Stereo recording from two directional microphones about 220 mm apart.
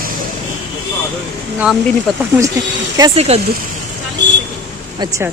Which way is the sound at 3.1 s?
30° right (ahead or behind).